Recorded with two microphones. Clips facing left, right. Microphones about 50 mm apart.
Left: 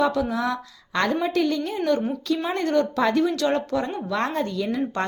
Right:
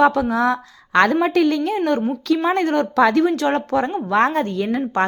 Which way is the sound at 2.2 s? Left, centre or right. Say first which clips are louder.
Right 6 dB; right.